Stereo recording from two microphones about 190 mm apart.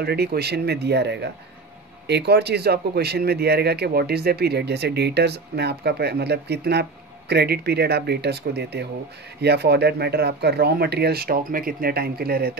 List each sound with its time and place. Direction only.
0.0 s speech: 55° right (ahead or behind)